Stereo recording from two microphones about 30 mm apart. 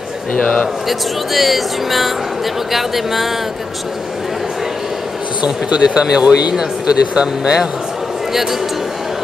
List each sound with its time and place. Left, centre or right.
0.3 s a man's voice: left
0.8 s speech: centre
5.4 s speech: right
8.3 s speech: centre